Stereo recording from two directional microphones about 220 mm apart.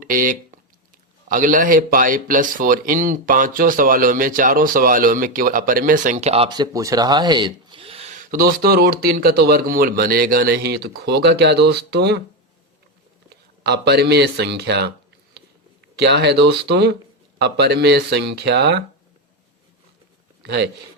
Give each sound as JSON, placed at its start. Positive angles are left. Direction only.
{"t": 0.0, "sound": "a man's voice", "side_deg": -40}
{"t": 13.3, "sound": "speech", "side_deg": -50}